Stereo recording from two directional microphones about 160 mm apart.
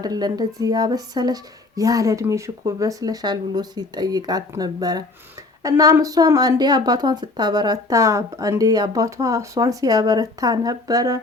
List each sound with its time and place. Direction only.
0.0 s speech: 25° right (ahead or behind)